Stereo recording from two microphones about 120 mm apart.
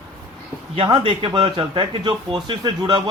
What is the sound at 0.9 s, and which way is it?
A man's voice, 50° right (ahead or behind).